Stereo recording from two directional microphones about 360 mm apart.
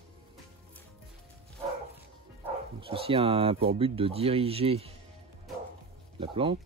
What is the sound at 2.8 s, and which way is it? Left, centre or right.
Speech, centre.